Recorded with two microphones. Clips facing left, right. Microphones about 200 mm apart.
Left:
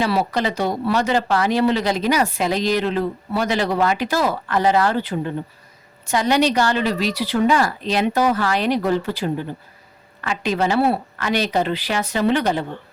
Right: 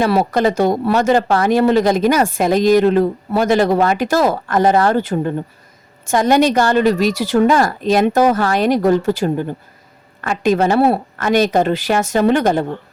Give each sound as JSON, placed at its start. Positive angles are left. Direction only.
{"t": 0.0, "sound": "speech", "side_deg": -50}